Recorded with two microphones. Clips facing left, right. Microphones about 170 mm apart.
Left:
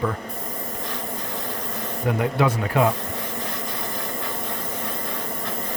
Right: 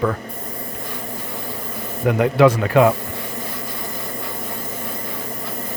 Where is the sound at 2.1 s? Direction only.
90° right.